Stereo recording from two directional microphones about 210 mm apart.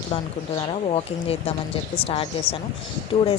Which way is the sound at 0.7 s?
30° left (ahead or behind).